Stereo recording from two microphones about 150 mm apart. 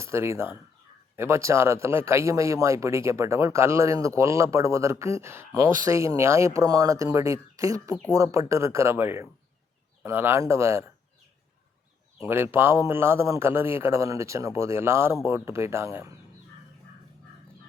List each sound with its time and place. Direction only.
0.0 s a man's voice: 15° right (ahead or behind)
12.3 s a man's voice: 15° right (ahead or behind)